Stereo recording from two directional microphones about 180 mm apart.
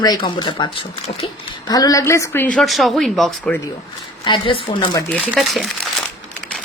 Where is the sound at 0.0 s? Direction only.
25° left (ahead or behind); by 3.6 s 5° left (ahead or behind).